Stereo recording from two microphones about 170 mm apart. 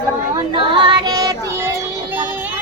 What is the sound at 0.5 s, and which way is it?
Female singing, 30° right (ahead or behind).